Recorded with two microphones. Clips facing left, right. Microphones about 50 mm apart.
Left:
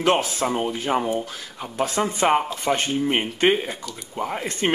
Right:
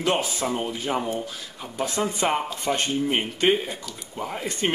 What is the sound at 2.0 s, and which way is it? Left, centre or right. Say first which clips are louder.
Speech: left 4 dB; left.